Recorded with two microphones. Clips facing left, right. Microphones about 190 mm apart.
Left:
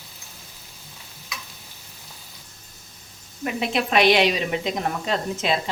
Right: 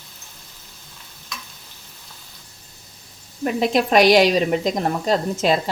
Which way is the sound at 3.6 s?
40° right (ahead or behind).